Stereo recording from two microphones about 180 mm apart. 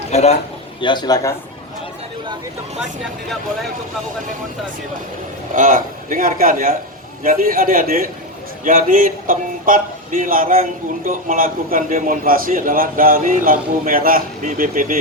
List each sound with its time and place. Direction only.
0.1 s speech: 35° left (ahead or behind)
0.8 s speech: 25° left (ahead or behind)
5.5 s speech: 45° right (ahead or behind)